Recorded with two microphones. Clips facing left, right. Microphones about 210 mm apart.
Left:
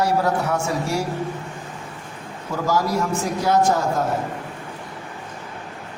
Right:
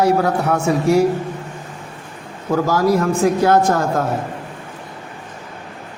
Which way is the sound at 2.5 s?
60° right (ahead or behind).